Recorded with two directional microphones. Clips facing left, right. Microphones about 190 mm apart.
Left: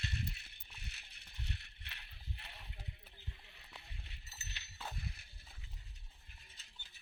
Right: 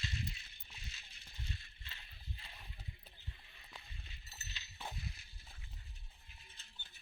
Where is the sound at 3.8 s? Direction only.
65° left (ahead or behind).